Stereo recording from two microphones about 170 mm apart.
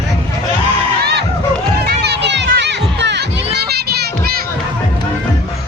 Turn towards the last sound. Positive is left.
turn(degrees=-65)  # may be behind; listen again after turning